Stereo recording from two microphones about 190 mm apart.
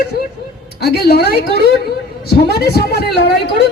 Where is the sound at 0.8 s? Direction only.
55° left (ahead or behind).